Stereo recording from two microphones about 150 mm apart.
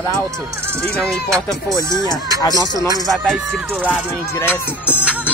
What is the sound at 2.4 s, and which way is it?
Speech, 25° left (ahead or behind).